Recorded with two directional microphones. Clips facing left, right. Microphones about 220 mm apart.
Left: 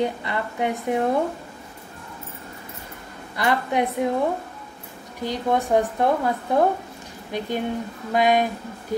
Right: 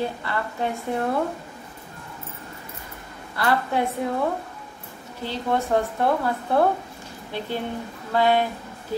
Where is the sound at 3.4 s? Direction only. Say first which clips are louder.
Left 1 dB; 20° left (ahead or behind).